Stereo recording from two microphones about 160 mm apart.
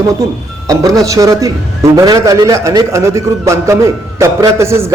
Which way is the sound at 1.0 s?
20° right (ahead or behind).